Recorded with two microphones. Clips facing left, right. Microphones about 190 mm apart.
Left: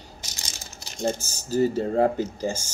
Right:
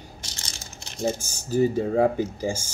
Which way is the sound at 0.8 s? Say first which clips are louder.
Even; 5° right (ahead or behind).